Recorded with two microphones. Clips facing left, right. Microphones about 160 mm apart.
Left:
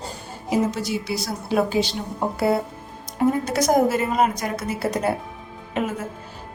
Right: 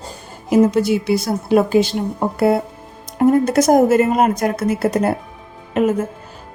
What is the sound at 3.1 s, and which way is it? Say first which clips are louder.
A woman's voice: right 7 dB; 50° right (ahead or behind).